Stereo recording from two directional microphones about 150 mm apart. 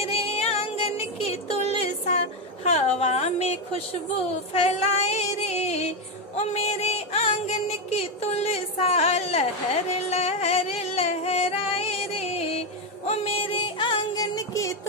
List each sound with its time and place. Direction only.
0.0 s music: 40° left (ahead or behind)
2.0 s a sound: 50° left (ahead or behind)
4.6 s music: 45° left (ahead or behind); by 14.8 s 25° left (ahead or behind)